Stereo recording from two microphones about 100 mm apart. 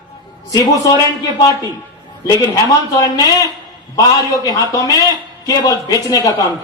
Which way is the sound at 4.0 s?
35° left (ahead or behind).